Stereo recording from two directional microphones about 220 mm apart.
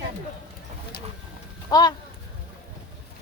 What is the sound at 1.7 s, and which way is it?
Speech, 20° left (ahead or behind).